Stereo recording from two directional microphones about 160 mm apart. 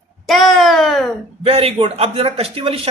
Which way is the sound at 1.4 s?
40° right (ahead or behind).